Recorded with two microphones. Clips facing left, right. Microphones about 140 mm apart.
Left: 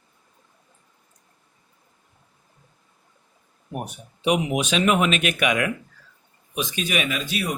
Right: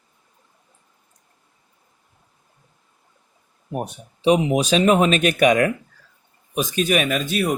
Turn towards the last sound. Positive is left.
turn(degrees=-45)  # may be behind; listen again after turning